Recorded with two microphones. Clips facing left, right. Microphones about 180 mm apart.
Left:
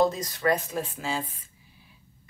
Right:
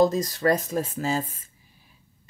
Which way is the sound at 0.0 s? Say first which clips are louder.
Right 3 dB; 35° right (ahead or behind).